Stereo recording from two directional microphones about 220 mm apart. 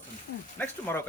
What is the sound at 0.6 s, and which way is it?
Speech, 10° left (ahead or behind).